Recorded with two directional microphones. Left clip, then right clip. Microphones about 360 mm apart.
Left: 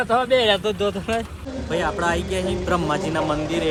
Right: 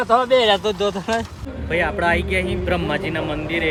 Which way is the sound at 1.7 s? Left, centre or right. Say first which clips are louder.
Right 3 dB; centre.